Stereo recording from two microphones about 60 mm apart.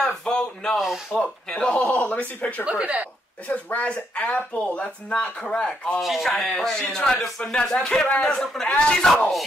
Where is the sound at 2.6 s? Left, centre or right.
Right.